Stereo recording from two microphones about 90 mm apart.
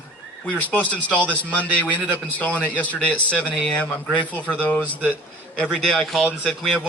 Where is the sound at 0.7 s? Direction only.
15° left (ahead or behind).